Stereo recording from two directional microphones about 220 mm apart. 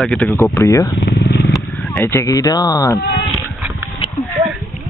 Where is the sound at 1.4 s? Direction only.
Centre (ahead or behind).